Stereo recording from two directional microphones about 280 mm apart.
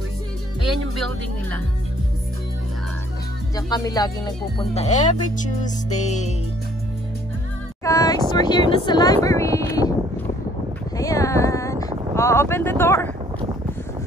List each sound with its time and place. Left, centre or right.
0.7 s speech: centre
3.5 s speech: centre
7.8 s speech: centre
11.0 s a sound: centre
12.2 s speech: centre